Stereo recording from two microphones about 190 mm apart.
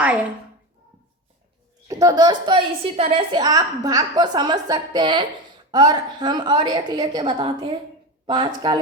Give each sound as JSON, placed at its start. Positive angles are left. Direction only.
{"t": 1.9, "sound": "a woman's voice", "side_deg": -20}